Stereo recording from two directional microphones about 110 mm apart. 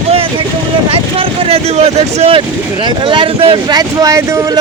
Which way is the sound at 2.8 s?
45° right (ahead or behind).